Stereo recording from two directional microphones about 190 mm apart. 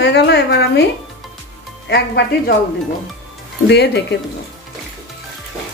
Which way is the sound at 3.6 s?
60° left (ahead or behind).